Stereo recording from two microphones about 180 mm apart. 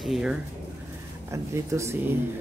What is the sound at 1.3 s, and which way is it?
Speech, 15° right (ahead or behind).